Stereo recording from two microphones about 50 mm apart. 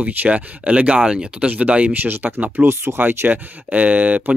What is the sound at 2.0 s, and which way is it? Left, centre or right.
Speech, right.